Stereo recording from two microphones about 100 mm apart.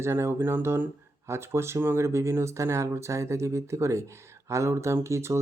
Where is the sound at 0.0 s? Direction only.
25° right (ahead or behind).